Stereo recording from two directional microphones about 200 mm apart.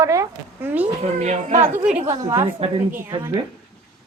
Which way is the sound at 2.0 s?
20° right (ahead or behind).